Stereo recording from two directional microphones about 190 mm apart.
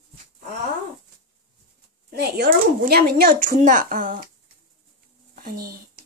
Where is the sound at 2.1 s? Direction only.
55° right (ahead or behind).